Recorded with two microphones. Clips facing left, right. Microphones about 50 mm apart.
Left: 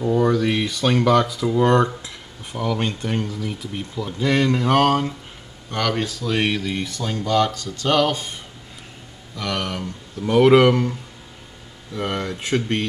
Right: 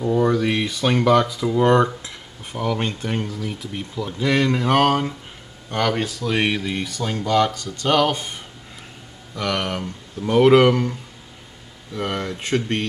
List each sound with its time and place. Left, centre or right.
0.2 s speech: centre
9.5 s speech: centre
10.2 s speech: centre